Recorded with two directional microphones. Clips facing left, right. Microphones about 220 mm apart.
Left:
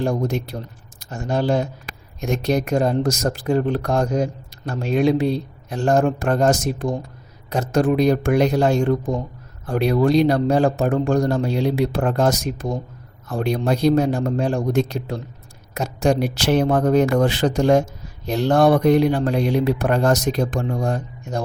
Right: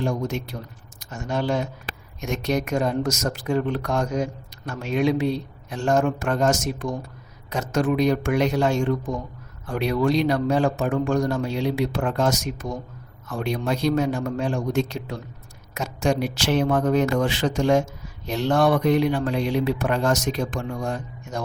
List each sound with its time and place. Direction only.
0.0 s speech: 35° left (ahead or behind)